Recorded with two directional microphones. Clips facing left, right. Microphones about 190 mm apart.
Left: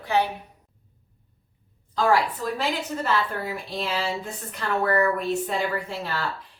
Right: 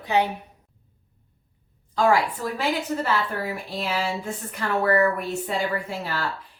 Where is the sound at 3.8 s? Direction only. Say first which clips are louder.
Right 1 dB; 10° right (ahead or behind).